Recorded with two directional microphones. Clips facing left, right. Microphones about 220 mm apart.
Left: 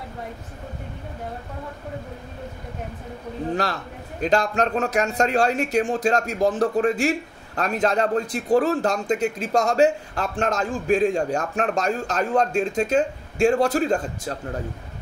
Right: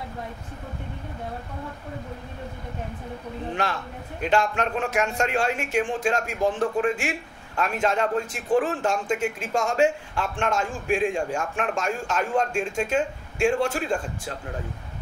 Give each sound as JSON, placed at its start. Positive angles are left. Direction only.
{"t": 4.2, "sound": "a man's voice", "side_deg": 40}